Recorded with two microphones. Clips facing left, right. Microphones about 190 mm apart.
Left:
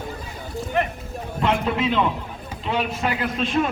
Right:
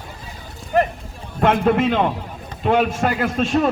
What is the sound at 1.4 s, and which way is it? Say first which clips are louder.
A man's voice: right 6 dB; 50° right (ahead or behind).